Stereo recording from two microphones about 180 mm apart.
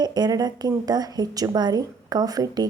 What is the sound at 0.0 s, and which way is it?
A woman's voice, 20° right (ahead or behind).